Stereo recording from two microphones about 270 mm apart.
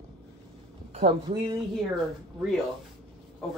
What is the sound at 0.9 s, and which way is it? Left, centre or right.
Speech, right.